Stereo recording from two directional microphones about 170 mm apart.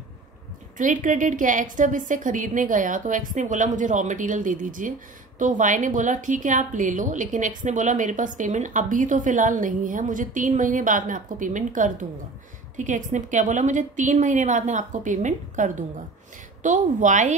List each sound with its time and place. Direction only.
0.7 s a woman's voice: 50° right (ahead or behind)